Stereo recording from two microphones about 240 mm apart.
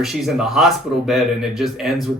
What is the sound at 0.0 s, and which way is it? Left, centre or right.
Speech, centre.